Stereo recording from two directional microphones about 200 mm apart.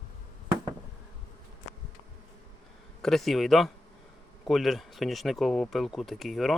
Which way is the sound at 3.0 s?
Centre (ahead or behind).